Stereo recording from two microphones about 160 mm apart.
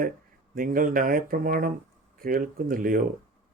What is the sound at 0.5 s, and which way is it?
Speech, 60° right (ahead or behind).